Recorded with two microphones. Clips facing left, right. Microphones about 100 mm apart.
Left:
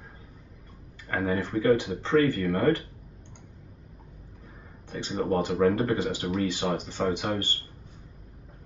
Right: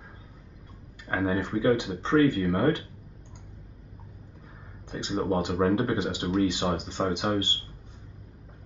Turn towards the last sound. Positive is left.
turn(degrees=-20)  # may be behind; listen again after turning